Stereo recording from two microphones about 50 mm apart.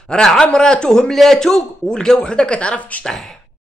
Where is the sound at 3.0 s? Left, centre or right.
Centre.